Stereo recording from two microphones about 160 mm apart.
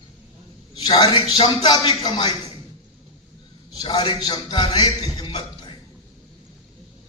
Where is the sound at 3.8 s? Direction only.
25° left (ahead or behind).